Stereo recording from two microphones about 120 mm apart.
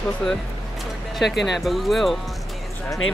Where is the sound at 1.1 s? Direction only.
Centre (ahead or behind).